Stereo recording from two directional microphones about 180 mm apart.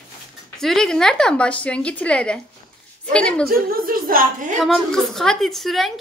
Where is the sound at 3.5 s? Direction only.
55° right (ahead or behind).